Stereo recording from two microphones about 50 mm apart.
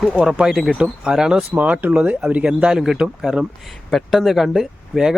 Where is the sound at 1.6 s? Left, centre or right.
Right.